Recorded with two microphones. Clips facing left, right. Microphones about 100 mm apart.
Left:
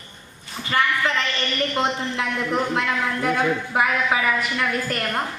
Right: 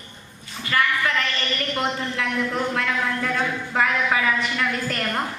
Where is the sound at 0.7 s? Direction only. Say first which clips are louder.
Left 1 dB; 25° left (ahead or behind).